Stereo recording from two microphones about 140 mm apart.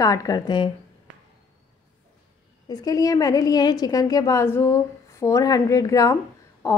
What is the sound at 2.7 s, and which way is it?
A woman's voice, 25° left (ahead or behind).